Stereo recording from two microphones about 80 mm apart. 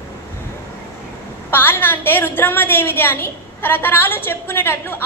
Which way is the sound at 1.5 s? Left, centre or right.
Left.